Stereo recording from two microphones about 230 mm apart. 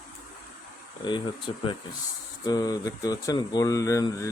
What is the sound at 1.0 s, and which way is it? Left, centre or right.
A man's voice, left.